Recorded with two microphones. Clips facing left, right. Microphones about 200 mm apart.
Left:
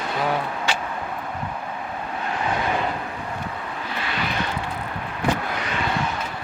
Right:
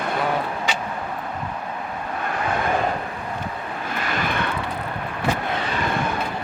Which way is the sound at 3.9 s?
45° right (ahead or behind).